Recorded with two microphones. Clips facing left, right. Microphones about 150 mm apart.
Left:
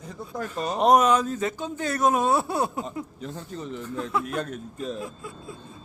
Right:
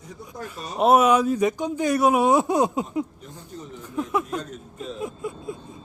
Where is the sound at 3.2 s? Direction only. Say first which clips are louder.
Left 5 dB; 90° left.